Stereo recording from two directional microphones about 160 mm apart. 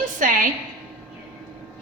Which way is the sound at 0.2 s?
55° right (ahead or behind).